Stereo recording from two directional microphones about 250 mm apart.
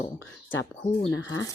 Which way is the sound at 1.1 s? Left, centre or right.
Left.